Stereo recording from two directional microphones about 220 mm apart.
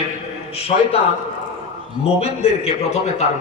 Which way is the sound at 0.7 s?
30° left (ahead or behind).